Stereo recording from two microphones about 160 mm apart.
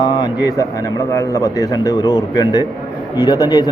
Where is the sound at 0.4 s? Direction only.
20° left (ahead or behind).